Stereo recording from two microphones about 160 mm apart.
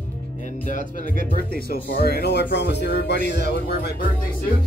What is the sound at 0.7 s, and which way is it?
Speech, 55° left (ahead or behind).